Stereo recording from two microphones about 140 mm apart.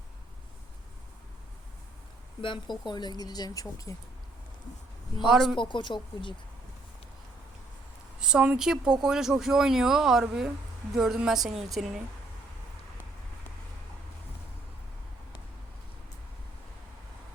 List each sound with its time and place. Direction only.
2.4 s speech: 35° left (ahead or behind)
5.3 s speech: 5° right (ahead or behind)
5.5 s speech: 35° left (ahead or behind)
8.2 s speech: 5° right (ahead or behind)